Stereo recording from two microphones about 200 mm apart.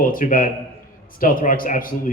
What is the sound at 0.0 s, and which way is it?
Speech, 45° left (ahead or behind).